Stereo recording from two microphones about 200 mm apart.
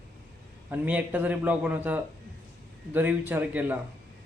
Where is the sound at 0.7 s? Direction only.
5° right (ahead or behind).